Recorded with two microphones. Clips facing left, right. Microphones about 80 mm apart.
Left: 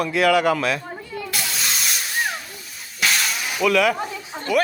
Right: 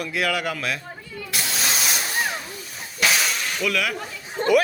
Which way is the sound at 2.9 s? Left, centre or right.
Centre.